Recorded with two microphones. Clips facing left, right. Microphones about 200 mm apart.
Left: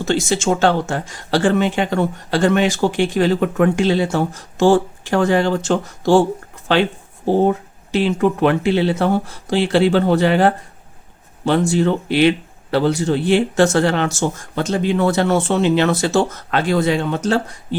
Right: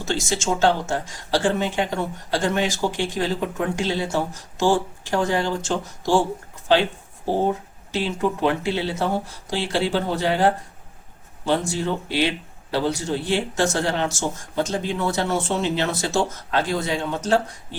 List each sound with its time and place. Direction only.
0.0 s speech: 60° left (ahead or behind)
7.9 s speech: 65° left (ahead or behind)
11.7 s speech: 65° left (ahead or behind)